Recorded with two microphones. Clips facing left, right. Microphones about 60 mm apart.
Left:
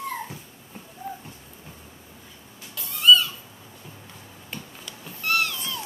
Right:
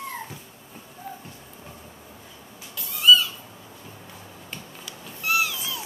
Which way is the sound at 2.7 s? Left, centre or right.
Centre.